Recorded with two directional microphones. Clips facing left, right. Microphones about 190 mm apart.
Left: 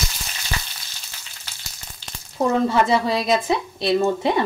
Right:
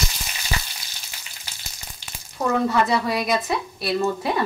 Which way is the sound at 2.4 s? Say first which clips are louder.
Left 2 dB; 25° left (ahead or behind).